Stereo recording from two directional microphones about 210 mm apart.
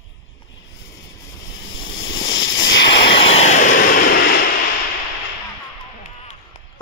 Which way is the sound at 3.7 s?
45° left (ahead or behind).